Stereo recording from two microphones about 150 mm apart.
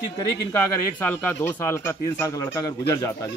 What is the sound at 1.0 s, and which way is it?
Speech, 15° left (ahead or behind).